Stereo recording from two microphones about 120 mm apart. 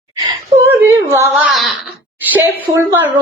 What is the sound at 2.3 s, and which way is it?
Speech, 15° right (ahead or behind).